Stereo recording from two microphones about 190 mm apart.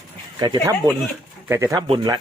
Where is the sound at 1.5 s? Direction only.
15° right (ahead or behind).